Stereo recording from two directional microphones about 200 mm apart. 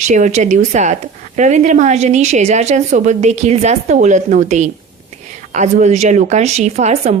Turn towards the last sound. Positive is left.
turn(degrees=-35)  # may be behind; listen again after turning